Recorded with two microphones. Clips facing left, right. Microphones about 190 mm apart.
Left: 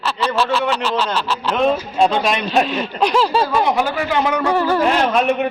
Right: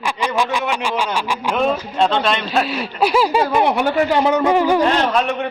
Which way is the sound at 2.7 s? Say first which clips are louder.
Even; 10° right (ahead or behind).